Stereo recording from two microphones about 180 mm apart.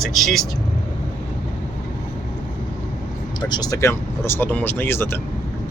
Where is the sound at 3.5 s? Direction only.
20° left (ahead or behind).